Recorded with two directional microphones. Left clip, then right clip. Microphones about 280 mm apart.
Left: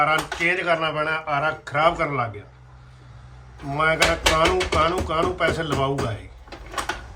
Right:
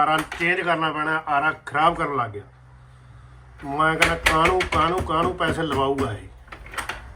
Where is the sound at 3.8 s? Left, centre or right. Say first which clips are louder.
Even; centre.